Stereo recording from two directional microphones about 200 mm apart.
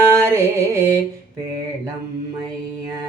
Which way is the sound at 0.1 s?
15° right (ahead or behind).